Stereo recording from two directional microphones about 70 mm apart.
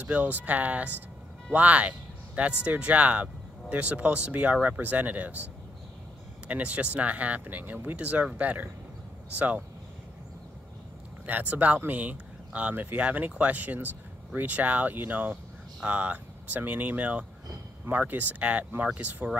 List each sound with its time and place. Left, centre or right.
0.0 s speech: right
11.2 s speech: right